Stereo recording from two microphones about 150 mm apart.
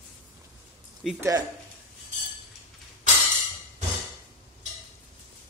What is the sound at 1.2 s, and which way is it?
Speech, 20° right (ahead or behind).